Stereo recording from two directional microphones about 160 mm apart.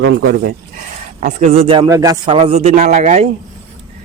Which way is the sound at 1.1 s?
50° right (ahead or behind).